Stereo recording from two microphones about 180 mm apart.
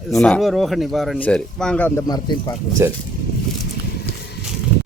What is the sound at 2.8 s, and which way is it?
Speech, 15° right (ahead or behind).